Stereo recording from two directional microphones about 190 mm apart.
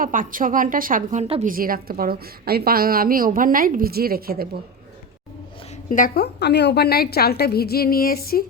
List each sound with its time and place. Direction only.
0.0 s a woman's voice: 45° right (ahead or behind)
1.2 s a woman's voice: 35° right (ahead or behind)
1.5 s a woman's voice: 50° right (ahead or behind)
5.7 s a woman's voice: 45° left (ahead or behind)